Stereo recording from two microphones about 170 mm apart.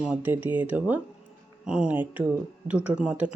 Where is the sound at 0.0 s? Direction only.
10° right (ahead or behind).